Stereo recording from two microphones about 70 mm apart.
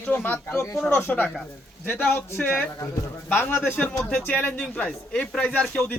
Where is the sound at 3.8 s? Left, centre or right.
Centre.